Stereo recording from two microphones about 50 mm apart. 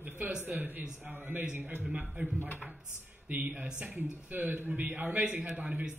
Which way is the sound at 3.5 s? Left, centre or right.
Centre.